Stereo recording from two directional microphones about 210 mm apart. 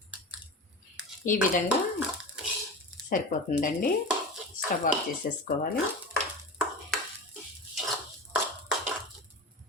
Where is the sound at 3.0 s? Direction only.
40° left (ahead or behind).